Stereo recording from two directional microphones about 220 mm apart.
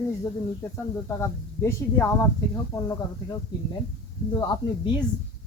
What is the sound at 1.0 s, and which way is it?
Speech, 10° left (ahead or behind).